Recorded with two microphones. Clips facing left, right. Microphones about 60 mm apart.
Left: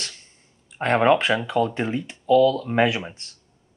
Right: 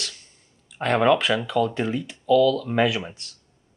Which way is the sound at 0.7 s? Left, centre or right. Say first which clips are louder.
Left 1 dB; left.